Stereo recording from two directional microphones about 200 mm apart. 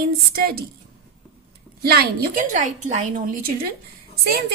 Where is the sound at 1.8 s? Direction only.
50° right (ahead or behind).